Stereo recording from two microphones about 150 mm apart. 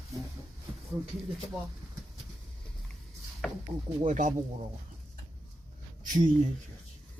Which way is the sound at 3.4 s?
5° left (ahead or behind).